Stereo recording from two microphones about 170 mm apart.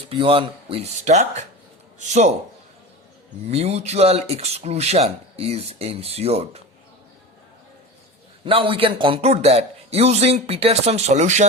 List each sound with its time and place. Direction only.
0.1 s speech: 30° right (ahead or behind)
1.0 s speech: 45° right (ahead or behind)
3.5 s speech: 40° right (ahead or behind)
8.4 s speech: 30° right (ahead or behind)